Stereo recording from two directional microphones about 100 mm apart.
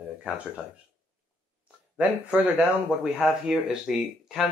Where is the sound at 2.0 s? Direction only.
15° right (ahead or behind).